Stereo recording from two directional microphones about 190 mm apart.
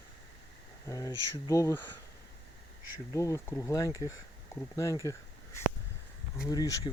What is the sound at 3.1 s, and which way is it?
Speech, 15° left (ahead or behind).